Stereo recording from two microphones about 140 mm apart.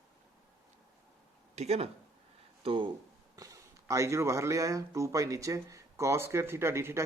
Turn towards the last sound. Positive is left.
turn(degrees=-20)  # may be behind; listen again after turning